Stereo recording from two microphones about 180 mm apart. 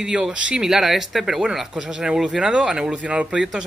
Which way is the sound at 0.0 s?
5° right (ahead or behind).